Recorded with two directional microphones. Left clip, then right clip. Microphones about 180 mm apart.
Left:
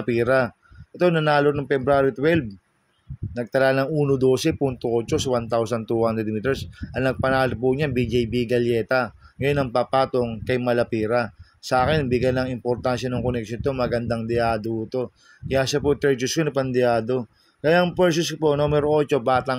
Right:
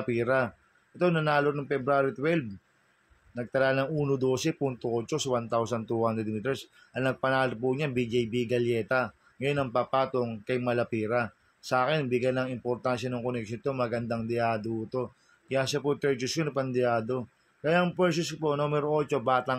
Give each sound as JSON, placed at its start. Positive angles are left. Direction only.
{"t": 0.0, "sound": "speech", "side_deg": 40}